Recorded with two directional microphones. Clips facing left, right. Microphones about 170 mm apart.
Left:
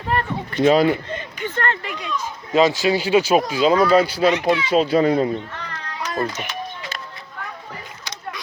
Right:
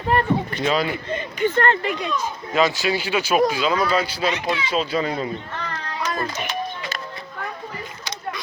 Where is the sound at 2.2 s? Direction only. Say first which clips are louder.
Left 5 dB; 30° left (ahead or behind); by 5.3 s 55° left (ahead or behind).